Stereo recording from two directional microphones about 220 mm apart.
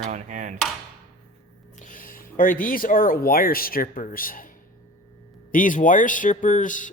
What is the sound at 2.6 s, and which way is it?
Speech, 40° left (ahead or behind).